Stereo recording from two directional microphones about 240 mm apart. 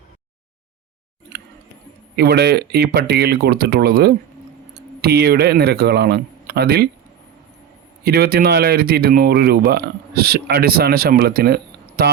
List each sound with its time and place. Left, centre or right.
2.1 s speech: right
8.0 s speech: right